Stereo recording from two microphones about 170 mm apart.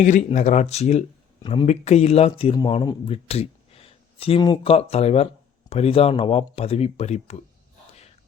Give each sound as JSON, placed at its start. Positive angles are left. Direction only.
{"t": 0.0, "sound": "speech", "side_deg": 45}
{"t": 1.4, "sound": "speech", "side_deg": 30}
{"t": 1.6, "sound": "speech", "side_deg": 40}